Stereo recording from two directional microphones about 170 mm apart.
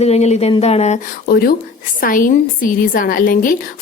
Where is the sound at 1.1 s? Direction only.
60° left (ahead or behind).